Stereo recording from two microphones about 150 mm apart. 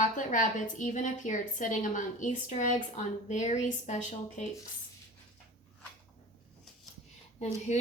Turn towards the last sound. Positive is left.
turn(degrees=50)  # may be behind; listen again after turning